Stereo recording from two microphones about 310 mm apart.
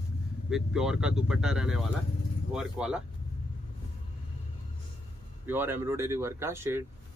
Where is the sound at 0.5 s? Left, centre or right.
Centre.